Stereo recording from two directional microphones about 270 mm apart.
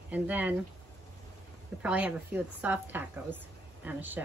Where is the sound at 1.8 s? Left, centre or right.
Centre.